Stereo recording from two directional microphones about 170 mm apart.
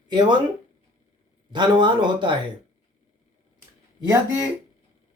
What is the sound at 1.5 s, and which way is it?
Speech, 25° right (ahead or behind).